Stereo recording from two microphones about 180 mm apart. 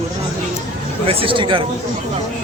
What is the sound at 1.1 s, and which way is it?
Speech, 30° right (ahead or behind).